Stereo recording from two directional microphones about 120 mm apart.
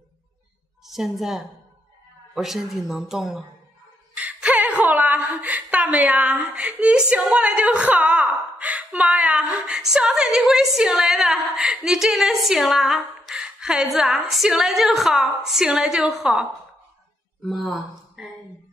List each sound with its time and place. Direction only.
0.8 s a woman's voice: centre (ahead or behind)